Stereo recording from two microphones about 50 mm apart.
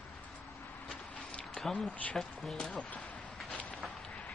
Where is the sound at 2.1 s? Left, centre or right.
Centre.